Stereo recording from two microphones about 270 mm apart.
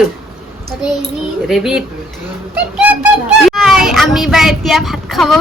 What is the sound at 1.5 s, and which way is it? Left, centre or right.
Speech, centre.